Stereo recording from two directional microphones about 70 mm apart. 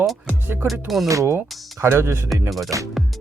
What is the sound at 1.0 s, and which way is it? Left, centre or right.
Speech, right.